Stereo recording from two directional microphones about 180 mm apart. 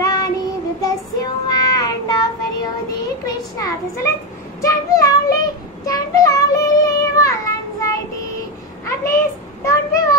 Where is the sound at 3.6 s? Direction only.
15° left (ahead or behind).